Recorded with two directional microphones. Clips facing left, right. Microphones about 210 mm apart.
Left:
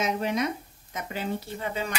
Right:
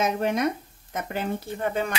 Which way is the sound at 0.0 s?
50° right (ahead or behind).